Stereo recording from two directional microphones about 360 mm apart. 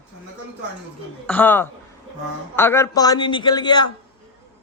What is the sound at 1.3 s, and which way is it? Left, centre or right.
A man's voice, centre.